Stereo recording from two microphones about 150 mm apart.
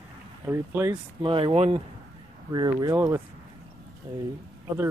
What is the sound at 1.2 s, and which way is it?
Speech, 35° right (ahead or behind).